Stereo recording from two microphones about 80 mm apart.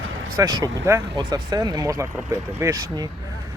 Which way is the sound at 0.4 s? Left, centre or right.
Right.